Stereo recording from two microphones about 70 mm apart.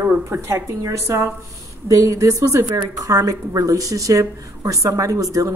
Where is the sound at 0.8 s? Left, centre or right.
Right.